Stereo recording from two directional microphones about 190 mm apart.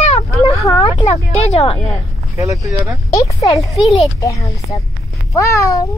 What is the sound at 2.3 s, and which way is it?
Speech, 15° right (ahead or behind).